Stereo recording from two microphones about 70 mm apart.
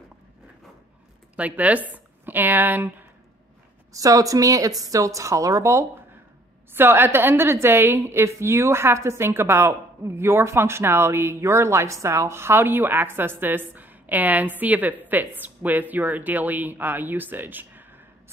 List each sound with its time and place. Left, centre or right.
1.3 s a woman's voice: right
3.9 s a woman's voice: right
6.7 s a woman's voice: right